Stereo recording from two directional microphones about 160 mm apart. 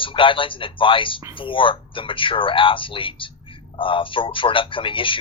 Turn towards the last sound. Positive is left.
turn(degrees=30)  # may be behind; listen again after turning